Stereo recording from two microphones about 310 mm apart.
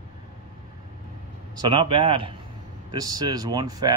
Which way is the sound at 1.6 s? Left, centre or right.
Centre.